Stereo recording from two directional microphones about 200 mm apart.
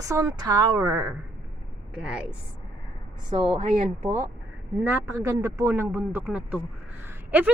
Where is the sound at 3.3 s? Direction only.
25° right (ahead or behind).